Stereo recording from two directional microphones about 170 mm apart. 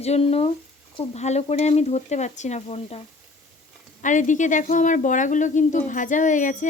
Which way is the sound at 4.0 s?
45° left (ahead or behind).